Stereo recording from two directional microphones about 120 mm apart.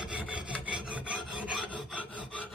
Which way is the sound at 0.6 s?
10° right (ahead or behind).